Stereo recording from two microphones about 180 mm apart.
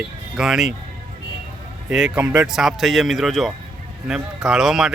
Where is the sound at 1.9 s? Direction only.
5° right (ahead or behind).